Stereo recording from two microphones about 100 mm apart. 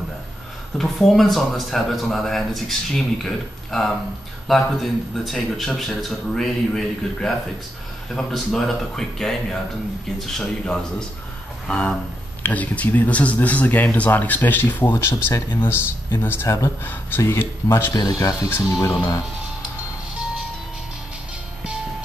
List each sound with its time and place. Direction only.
0.7 s speech: centre (ahead or behind)
11.6 s a sound: 10° left (ahead or behind)
12.4 s speech: 15° left (ahead or behind)
16.4 s speech: 35° left (ahead or behind)
17.9 s speech: 40° left (ahead or behind)